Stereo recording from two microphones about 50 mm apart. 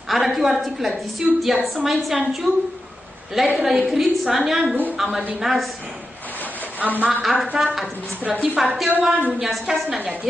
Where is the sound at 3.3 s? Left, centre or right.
Centre.